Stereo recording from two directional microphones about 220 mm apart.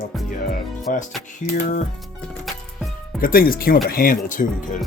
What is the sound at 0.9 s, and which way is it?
Speech, 40° left (ahead or behind).